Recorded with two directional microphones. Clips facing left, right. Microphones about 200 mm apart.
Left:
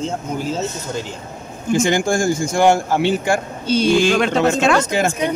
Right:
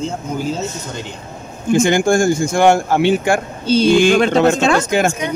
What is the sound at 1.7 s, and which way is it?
Speech, 55° right (ahead or behind).